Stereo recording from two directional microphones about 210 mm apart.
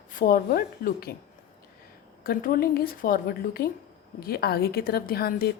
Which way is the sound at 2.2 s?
40° left (ahead or behind).